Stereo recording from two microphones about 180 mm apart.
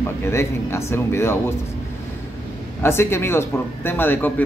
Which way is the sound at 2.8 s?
15° left (ahead or behind).